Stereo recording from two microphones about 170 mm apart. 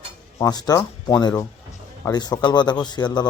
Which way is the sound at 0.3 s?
20° left (ahead or behind).